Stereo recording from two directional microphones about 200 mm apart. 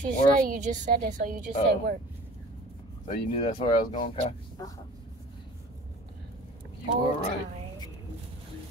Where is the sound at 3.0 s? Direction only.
30° left (ahead or behind).